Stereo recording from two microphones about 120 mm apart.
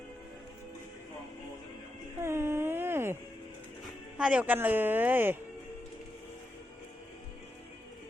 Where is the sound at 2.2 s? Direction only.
20° right (ahead or behind).